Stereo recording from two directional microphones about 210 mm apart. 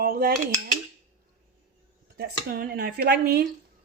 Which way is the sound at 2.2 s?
45° right (ahead or behind).